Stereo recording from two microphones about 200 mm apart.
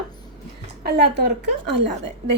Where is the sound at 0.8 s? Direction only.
55° right (ahead or behind).